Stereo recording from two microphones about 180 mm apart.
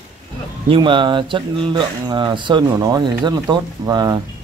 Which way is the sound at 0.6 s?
30° right (ahead or behind).